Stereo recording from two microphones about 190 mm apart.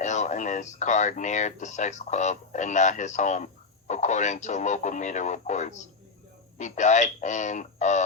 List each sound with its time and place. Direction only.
0.0 s speech: 40° left (ahead or behind)